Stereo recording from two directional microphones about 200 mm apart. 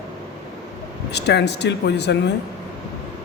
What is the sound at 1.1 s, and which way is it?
Speech, 55° left (ahead or behind).